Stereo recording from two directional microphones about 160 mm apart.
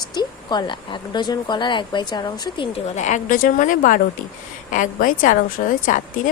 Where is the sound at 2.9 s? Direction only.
50° left (ahead or behind).